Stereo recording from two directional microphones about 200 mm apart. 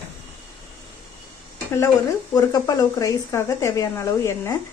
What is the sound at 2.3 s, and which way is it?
A woman's voice, 20° left (ahead or behind).